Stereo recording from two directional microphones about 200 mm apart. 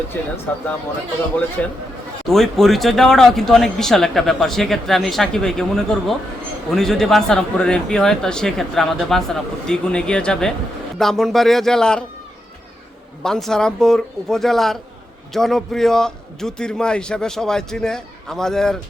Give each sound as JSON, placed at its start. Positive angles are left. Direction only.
{"t": 0.1, "sound": "speech", "side_deg": 10}
{"t": 1.6, "sound": "speech", "side_deg": 5}
{"t": 13.2, "sound": "speech", "side_deg": 0}